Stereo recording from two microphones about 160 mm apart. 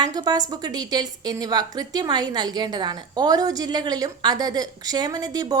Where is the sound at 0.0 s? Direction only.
25° right (ahead or behind).